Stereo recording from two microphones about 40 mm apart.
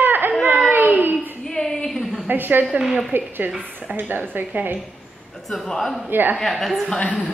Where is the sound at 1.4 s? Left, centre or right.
Centre.